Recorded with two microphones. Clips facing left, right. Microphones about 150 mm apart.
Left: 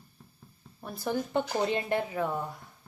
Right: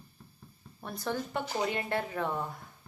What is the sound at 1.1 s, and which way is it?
Speech, 20° left (ahead or behind).